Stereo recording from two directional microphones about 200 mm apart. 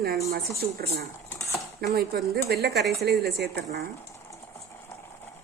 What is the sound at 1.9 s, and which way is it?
Speech, 50° right (ahead or behind).